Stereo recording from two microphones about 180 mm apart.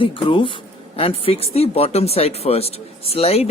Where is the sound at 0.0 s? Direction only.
30° left (ahead or behind).